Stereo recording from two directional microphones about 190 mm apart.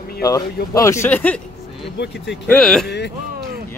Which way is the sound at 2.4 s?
5° left (ahead or behind).